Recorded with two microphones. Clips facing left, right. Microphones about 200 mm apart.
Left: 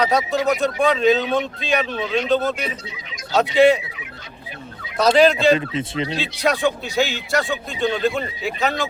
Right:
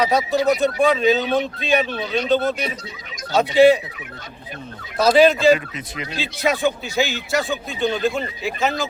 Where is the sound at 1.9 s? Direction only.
35° right (ahead or behind).